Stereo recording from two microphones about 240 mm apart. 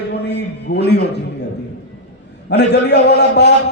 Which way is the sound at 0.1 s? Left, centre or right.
Left.